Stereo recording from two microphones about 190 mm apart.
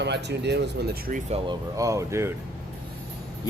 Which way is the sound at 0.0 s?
65° right (ahead or behind).